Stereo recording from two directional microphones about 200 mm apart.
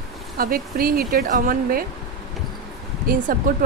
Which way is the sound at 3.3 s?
45° right (ahead or behind).